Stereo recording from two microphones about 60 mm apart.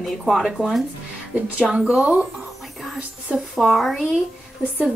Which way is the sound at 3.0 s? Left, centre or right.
Centre.